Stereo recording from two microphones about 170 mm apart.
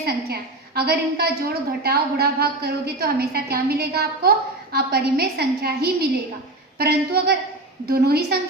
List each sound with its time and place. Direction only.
0.0 s a woman's voice: 65° right (ahead or behind)